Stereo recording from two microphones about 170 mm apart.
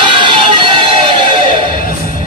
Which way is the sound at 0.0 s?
30° right (ahead or behind).